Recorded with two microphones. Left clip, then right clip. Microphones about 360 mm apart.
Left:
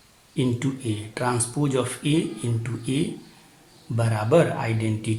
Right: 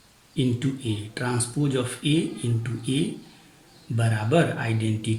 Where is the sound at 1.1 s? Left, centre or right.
Centre.